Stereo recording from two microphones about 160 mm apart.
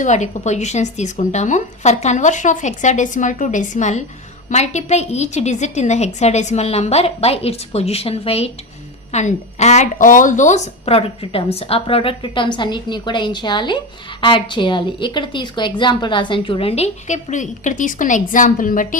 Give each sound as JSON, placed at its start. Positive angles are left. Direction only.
{"t": 0.0, "sound": "a woman's voice", "side_deg": 50}